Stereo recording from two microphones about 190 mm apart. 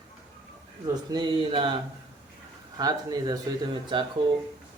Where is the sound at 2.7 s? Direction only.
20° right (ahead or behind).